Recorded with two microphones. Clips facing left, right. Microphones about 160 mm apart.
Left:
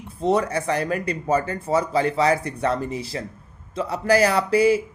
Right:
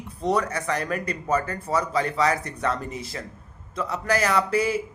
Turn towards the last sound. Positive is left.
turn(degrees=30)  # may be behind; listen again after turning